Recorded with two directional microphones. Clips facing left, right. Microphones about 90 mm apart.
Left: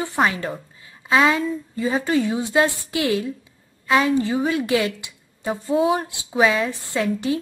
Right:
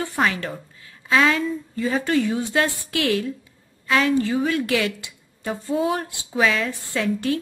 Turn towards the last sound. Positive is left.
turn(degrees=20)  # may be behind; listen again after turning